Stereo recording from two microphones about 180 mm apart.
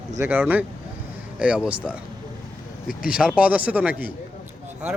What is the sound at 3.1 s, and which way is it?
Speech, 5° right (ahead or behind).